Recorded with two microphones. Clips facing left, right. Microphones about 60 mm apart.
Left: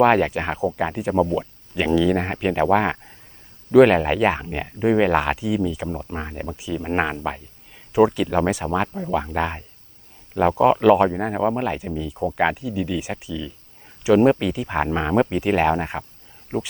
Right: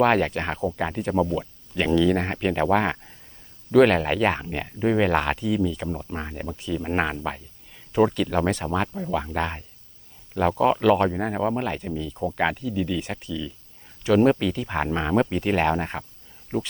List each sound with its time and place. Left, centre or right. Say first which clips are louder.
0.0 s speech: left 3 dB; centre
1.4 s a sound: left 2 dB; centre
2.0 s speech: left 1 dB; centre
16.5 s speech: left 1 dB; left